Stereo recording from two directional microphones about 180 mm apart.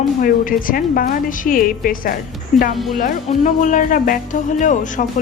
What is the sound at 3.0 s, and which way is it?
Speech, 45° left (ahead or behind).